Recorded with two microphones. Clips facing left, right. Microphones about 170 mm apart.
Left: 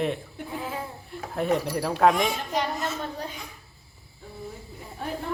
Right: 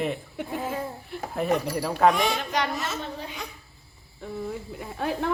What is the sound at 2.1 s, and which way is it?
Speech, 75° right (ahead or behind).